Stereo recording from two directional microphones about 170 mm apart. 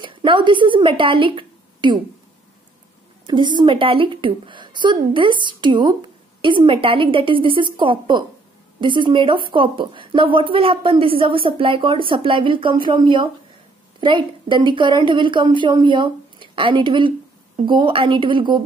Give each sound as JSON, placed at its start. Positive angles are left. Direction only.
{"t": 0.0, "sound": "a woman's voice", "side_deg": -30}
{"t": 3.3, "sound": "a woman's voice", "side_deg": -25}